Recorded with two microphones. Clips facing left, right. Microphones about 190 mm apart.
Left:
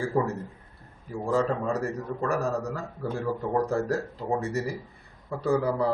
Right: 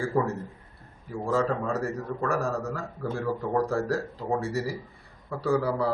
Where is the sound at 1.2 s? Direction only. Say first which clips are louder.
Left 1 dB; 15° left (ahead or behind).